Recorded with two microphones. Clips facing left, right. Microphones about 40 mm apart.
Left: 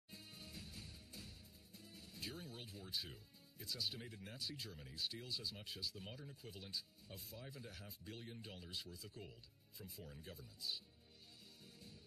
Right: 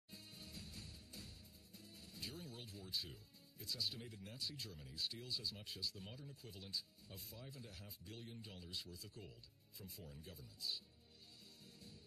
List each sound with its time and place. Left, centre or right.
0.4 s music: centre
2.2 s speech: centre
11.6 s music: centre